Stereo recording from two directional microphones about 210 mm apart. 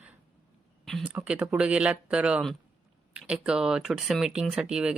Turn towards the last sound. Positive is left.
turn(degrees=-5)  # may be behind; listen again after turning